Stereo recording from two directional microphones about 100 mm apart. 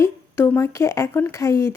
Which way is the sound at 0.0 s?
25° left (ahead or behind).